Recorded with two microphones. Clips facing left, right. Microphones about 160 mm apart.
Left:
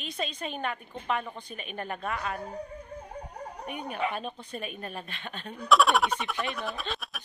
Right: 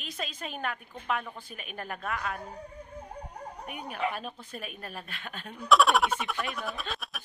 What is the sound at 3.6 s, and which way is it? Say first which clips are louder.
A woman's voice: left 1 dB; 5° right (ahead or behind).